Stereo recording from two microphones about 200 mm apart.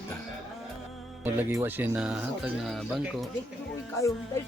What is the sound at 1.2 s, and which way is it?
Speech, 10° right (ahead or behind).